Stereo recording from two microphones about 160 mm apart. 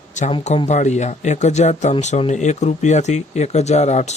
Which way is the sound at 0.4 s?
45° left (ahead or behind).